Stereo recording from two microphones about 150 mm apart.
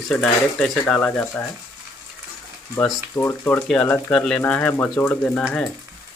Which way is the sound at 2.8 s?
15° left (ahead or behind).